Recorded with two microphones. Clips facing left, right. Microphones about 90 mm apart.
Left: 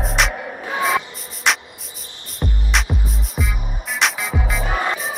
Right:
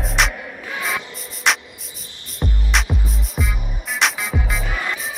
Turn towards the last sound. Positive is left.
turn(degrees=40)  # may be behind; listen again after turning